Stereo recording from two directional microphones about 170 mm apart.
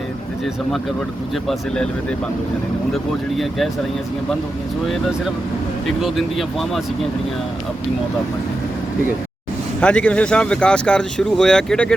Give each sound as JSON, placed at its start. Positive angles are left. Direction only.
{"t": 1.5, "sound": "speech", "side_deg": 5}
{"t": 6.0, "sound": "speech", "side_deg": 0}
{"t": 9.8, "sound": "speech", "side_deg": 5}